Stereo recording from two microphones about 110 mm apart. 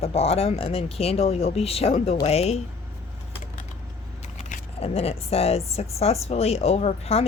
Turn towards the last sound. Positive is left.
turn(degrees=70)  # may be behind; listen again after turning